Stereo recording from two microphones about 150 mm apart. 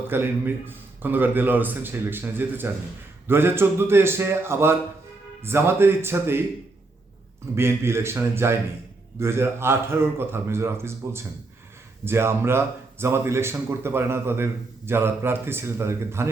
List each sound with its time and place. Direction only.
0.1 s speech: 15° right (ahead or behind)
7.5 s speech: 15° right (ahead or behind)